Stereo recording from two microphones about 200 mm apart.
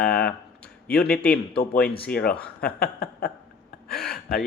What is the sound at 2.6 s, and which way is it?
Speech, 50° left (ahead or behind).